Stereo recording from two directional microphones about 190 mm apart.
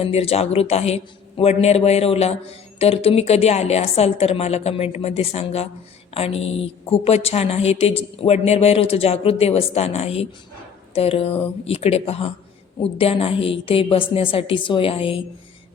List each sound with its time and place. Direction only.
0.0 s a man's voice: 30° left (ahead or behind)